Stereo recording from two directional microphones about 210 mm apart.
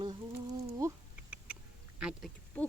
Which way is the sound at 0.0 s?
20° right (ahead or behind).